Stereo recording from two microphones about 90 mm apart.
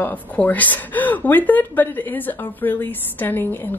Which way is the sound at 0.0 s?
20° left (ahead or behind).